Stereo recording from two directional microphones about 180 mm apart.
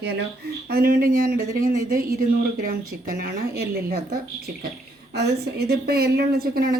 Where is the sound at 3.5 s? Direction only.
60° right (ahead or behind).